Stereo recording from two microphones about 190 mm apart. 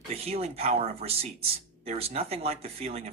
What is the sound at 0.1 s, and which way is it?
Speech, 30° right (ahead or behind).